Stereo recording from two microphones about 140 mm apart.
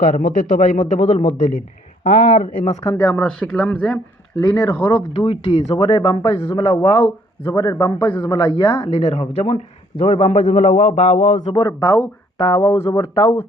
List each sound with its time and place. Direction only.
0.0 s speech: 70° left (ahead or behind)
1.3 s a man's voice: 70° left (ahead or behind)
2.0 s speech: 45° left (ahead or behind)
2.4 s a man's voice: 70° left (ahead or behind)
2.8 s speech: 20° left (ahead or behind)
4.4 s a man's voice: 25° left (ahead or behind)
5.1 s a man's voice: 40° left (ahead or behind)
8.9 s speech: 50° left (ahead or behind)
10.4 s speech: 65° left (ahead or behind)
11.4 s speech: 30° left (ahead or behind)
12.4 s speech: 45° left (ahead or behind)
12.6 s a man's voice: 25° left (ahead or behind)
13.0 s speech: 40° left (ahead or behind)